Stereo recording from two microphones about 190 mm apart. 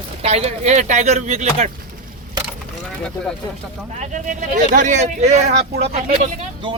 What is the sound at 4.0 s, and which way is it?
Speech, 40° right (ahead or behind).